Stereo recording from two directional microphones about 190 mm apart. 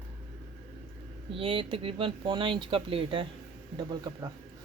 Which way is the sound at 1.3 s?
30° right (ahead or behind).